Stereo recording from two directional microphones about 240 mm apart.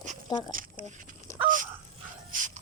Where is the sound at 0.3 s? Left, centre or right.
Centre.